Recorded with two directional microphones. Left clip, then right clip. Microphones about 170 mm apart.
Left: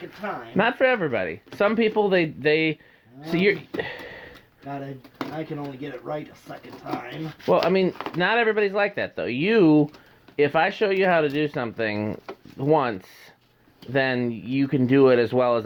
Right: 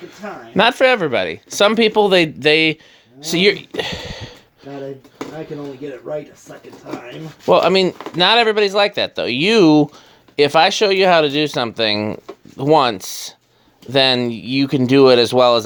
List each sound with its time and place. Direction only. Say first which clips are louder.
0.8 s speech: right 7 dB; 30° right (ahead or behind)
3.8 s a sound: right 7 dB; 25° right (ahead or behind)
7.5 s speech: right 7 dB; 25° right (ahead or behind)